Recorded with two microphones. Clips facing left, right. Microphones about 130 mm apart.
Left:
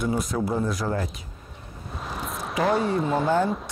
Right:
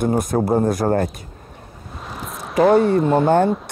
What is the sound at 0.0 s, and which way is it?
Speech, 50° right (ahead or behind).